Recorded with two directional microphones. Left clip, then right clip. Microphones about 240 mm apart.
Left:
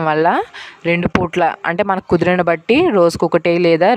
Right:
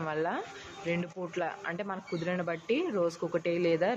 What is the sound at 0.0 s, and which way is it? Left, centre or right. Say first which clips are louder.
Speech: left 18 dB; left.